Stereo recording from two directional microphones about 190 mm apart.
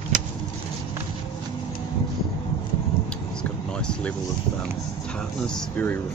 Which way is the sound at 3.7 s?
5° left (ahead or behind).